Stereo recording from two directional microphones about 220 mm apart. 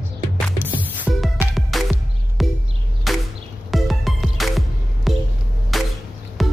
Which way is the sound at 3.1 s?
Centre (ahead or behind).